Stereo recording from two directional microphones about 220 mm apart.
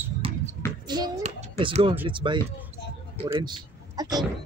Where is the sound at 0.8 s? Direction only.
20° right (ahead or behind).